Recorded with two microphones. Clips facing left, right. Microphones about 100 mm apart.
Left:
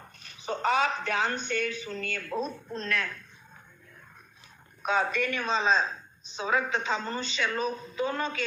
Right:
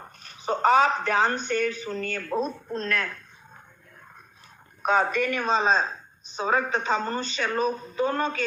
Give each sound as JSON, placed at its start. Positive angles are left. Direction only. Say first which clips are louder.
{"t": 0.0, "sound": "a sound", "louder": "right 6 dB", "side_deg": -40}
{"t": 1.5, "sound": "a woman's voice", "louder": "right 5 dB", "side_deg": -40}
{"t": 4.8, "sound": "a woman's voice", "louder": "right 4 dB", "side_deg": -45}